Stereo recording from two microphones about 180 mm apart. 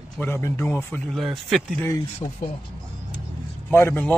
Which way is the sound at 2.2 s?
25° left (ahead or behind).